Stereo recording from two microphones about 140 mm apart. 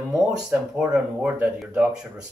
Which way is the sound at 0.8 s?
5° right (ahead or behind).